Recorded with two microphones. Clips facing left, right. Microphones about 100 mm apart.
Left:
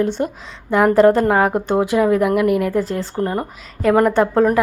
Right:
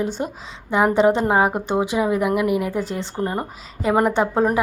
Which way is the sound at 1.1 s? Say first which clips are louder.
Left 4 dB; 25° right (ahead or behind).